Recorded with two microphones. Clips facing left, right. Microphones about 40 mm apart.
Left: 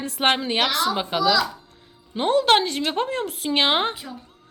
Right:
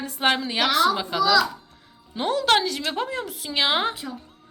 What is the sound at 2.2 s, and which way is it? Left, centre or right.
Speech, left.